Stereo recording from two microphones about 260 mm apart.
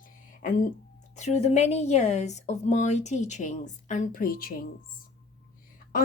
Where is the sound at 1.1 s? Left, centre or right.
Left.